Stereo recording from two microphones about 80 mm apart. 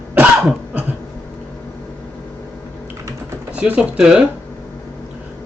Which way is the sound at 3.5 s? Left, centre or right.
Centre.